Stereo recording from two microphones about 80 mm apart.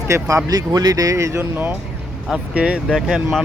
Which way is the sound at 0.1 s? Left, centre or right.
Right.